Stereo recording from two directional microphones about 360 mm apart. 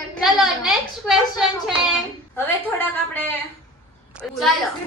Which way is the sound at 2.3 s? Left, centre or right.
Centre.